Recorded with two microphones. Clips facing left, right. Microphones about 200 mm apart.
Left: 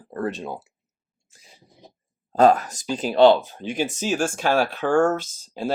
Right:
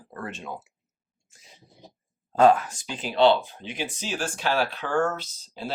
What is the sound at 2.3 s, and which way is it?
Speech, 40° left (ahead or behind).